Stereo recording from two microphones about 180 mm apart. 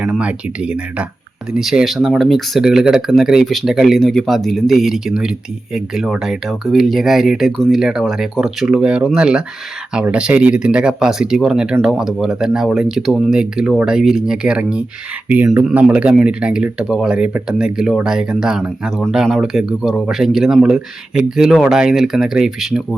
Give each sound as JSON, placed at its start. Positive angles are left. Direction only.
{"t": 0.0, "sound": "speech", "side_deg": -5}